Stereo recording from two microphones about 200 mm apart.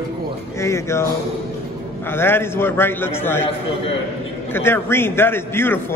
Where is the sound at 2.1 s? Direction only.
10° left (ahead or behind).